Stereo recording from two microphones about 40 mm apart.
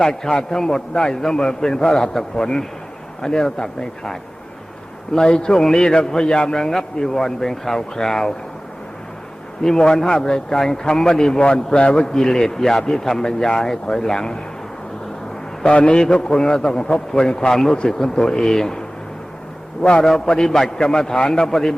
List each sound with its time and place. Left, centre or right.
0.0 s a man's voice: centre
9.6 s a man's voice: centre
12.1 s a man's voice: centre
15.6 s a man's voice: left; by 18.8 s centre
20.0 s a man's voice: centre